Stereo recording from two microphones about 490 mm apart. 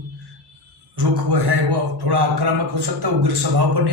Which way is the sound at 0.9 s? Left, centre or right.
Right.